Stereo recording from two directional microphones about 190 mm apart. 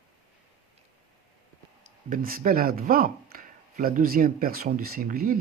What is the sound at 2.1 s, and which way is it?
Speech, 50° right (ahead or behind).